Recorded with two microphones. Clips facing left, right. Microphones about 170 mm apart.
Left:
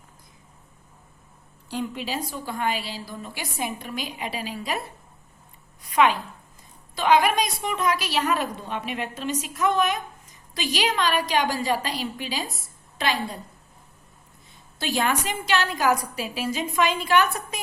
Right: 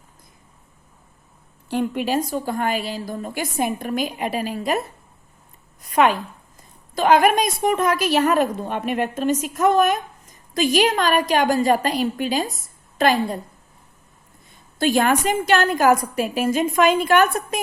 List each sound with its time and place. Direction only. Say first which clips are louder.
1.7 s a woman's voice: right 8 dB; 55° right (ahead or behind)
5.8 s a sound: right 3 dB; 45° right (ahead or behind)
6.9 s a woman's voice: right 4 dB; 50° right (ahead or behind)
14.8 s a woman's voice: right 7 dB; 50° right (ahead or behind)